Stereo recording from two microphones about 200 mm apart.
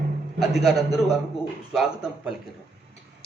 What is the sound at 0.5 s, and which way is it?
A man's voice, centre (ahead or behind).